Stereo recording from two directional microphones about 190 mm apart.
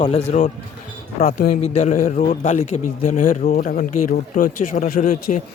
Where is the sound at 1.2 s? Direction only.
50° left (ahead or behind).